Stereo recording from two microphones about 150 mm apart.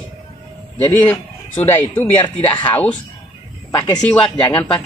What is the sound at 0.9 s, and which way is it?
Speech, 10° left (ahead or behind).